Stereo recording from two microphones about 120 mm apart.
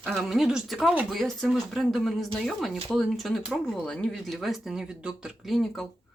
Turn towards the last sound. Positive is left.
turn(degrees=0)  # may be behind; listen again after turning